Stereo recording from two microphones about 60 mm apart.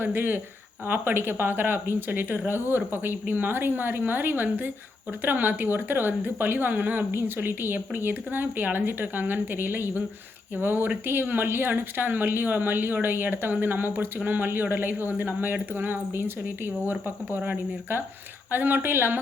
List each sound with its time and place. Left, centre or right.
0.0 s a woman's voice: right